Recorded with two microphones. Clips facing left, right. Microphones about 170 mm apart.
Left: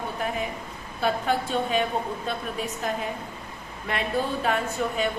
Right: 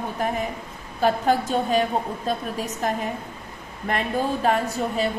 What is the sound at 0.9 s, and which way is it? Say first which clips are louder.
A woman's voice: right 4 dB; 40° right (ahead or behind).